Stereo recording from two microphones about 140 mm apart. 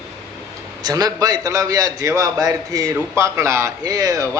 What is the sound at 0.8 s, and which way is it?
A man's voice, 25° right (ahead or behind).